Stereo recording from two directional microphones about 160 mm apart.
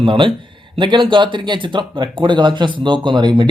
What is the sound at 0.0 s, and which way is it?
Speech, 30° right (ahead or behind).